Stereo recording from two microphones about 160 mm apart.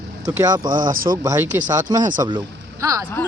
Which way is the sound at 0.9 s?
60° right (ahead or behind).